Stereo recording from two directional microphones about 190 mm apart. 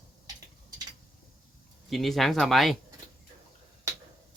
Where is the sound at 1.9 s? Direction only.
Centre (ahead or behind).